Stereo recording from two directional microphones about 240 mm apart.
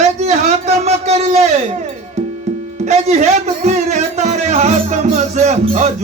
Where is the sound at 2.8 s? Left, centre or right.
Right.